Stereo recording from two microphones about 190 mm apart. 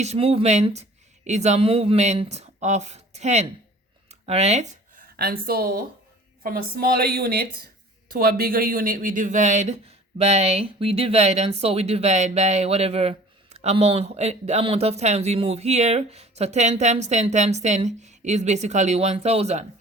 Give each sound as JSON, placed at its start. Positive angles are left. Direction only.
{"t": 0.0, "sound": "speech", "side_deg": -35}
{"t": 5.1, "sound": "a woman's voice", "side_deg": -55}